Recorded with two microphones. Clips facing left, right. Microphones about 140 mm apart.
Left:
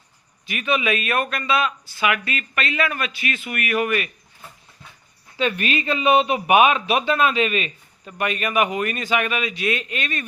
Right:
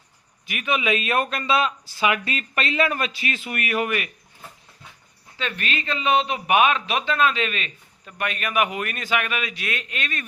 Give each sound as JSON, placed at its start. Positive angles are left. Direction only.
{"t": 0.4, "sound": "speech", "side_deg": -15}
{"t": 5.4, "sound": "a man's voice", "side_deg": 15}